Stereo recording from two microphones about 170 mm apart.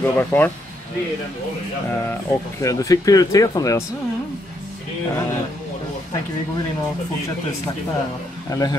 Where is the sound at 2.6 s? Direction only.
20° left (ahead or behind).